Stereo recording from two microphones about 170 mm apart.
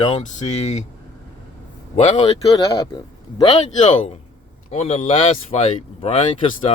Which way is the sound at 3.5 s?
40° left (ahead or behind).